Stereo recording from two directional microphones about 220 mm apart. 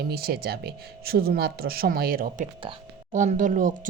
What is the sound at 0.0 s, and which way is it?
Speech, 45° right (ahead or behind).